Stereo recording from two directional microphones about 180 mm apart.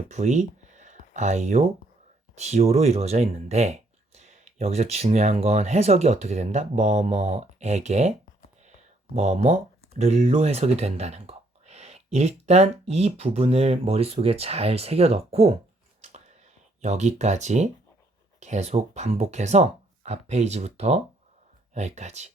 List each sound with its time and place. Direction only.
0.1 s speech: 40° right (ahead or behind)
9.1 s speech: 35° right (ahead or behind)
16.8 s speech: 40° right (ahead or behind)